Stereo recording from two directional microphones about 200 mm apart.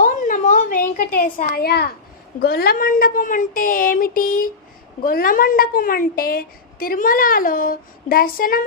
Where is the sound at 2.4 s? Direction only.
50° left (ahead or behind).